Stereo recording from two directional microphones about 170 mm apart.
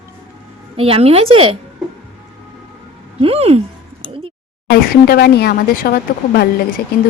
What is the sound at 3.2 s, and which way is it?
Speech, 35° right (ahead or behind).